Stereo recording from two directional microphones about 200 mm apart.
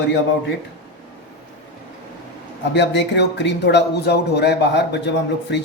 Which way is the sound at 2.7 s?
60° left (ahead or behind).